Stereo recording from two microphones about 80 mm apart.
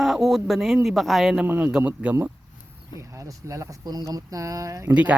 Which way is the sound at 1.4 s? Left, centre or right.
Right.